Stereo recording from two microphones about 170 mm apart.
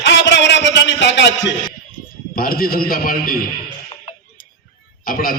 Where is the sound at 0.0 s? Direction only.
90° left.